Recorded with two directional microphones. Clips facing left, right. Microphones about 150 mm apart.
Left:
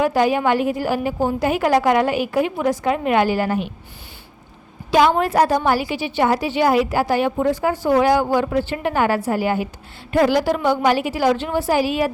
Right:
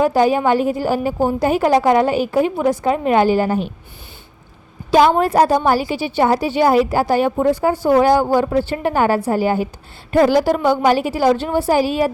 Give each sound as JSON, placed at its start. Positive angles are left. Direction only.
{"t": 0.0, "sound": "a woman's voice", "side_deg": -35}
{"t": 4.9, "sound": "a woman's voice", "side_deg": -40}